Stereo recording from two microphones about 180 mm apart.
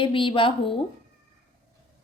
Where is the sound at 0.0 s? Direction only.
30° left (ahead or behind).